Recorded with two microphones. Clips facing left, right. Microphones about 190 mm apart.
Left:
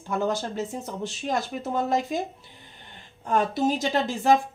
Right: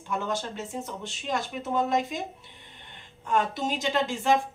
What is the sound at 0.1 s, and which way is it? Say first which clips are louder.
Speech: left 4 dB; 35° left (ahead or behind).